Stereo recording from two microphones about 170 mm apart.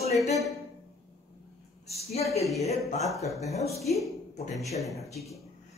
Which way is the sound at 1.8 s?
40° left (ahead or behind).